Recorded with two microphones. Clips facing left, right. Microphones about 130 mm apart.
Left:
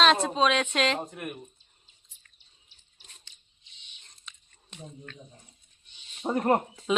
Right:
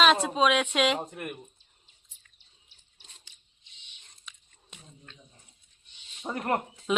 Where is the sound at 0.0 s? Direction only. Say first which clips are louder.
Even; 5° right (ahead or behind).